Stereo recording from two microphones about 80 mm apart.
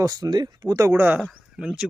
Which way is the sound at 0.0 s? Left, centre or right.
Right.